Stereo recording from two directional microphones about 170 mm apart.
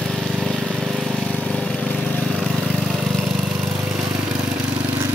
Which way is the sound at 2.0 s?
5° left (ahead or behind).